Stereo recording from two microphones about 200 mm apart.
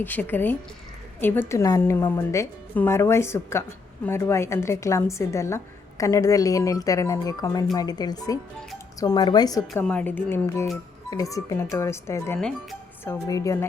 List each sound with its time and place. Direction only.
0.0 s a woman's voice: 10° left (ahead or behind)